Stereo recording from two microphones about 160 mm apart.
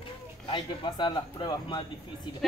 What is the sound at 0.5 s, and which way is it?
A man's voice, 30° left (ahead or behind).